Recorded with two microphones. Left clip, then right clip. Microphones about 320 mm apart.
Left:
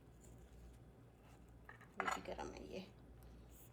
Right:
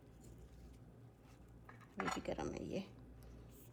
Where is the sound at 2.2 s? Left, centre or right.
Right.